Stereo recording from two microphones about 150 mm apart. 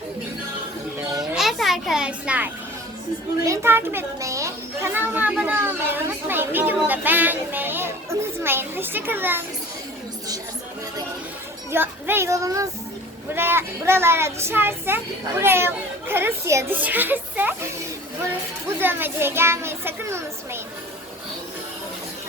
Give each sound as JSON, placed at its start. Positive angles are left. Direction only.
{"t": 1.2, "sound": "music", "side_deg": 0}
{"t": 3.4, "sound": "a child's voice", "side_deg": -20}
{"t": 11.7, "sound": "a child's voice", "side_deg": -15}
{"t": 18.8, "sound": "a child's voice", "side_deg": -15}